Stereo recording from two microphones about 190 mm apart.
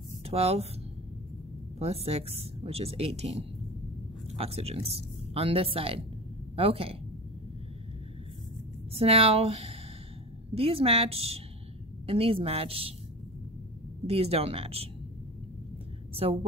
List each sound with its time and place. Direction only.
0.2 s speech: 30° right (ahead or behind)
1.8 s a woman's voice: 30° right (ahead or behind)
8.9 s a woman's voice: 30° right (ahead or behind)
14.0 s speech: 30° right (ahead or behind)